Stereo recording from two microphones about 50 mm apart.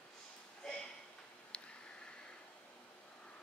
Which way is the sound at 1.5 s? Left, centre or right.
Left.